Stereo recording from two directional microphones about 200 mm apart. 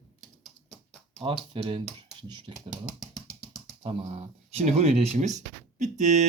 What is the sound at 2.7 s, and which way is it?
Speech, 5° right (ahead or behind).